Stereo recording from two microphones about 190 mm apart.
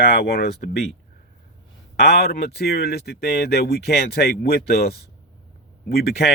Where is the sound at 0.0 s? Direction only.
55° left (ahead or behind).